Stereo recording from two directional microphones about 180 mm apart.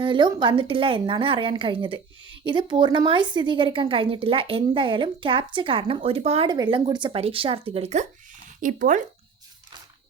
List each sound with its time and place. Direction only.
0.0 s a woman's voice: 25° right (ahead or behind); by 9.0 s 45° right (ahead or behind)